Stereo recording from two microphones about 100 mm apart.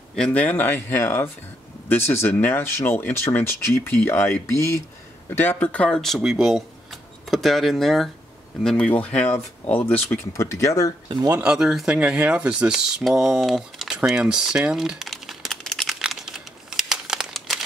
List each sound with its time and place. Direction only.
0.1 s speech: 10° left (ahead or behind)
10.3 s speech: 30° left (ahead or behind)
11.4 s speech: 5° right (ahead or behind)
16.0 s crumpling: 5° right (ahead or behind)